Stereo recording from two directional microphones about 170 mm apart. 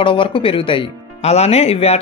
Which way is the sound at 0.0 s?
30° left (ahead or behind).